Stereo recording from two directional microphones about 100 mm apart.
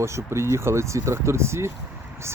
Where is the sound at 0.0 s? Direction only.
30° right (ahead or behind).